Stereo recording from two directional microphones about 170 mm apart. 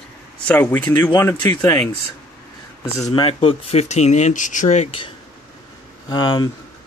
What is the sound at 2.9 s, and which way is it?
Speech, 20° left (ahead or behind).